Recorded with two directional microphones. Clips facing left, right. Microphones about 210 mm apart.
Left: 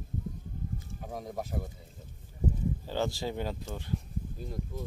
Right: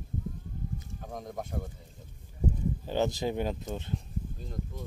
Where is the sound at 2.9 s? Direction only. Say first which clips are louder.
Right 5 dB; 20° right (ahead or behind).